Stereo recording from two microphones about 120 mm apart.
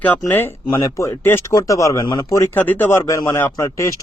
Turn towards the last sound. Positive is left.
turn(degrees=25)  # may be behind; listen again after turning